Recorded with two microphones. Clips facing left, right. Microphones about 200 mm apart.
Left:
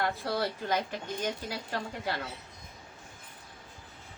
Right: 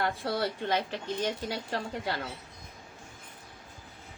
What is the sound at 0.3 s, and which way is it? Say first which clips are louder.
Speech: right 1 dB; 30° right (ahead or behind).